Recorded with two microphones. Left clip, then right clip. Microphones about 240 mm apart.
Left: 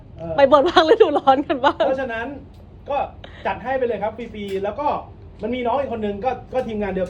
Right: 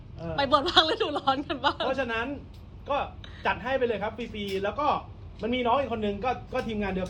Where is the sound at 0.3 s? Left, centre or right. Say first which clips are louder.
Left 9 dB; left.